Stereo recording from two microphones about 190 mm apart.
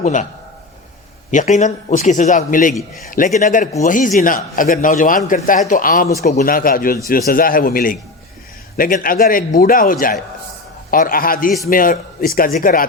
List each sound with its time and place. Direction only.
0.0 s a man's voice: 40° left (ahead or behind)
1.3 s a man's voice: 40° left (ahead or behind)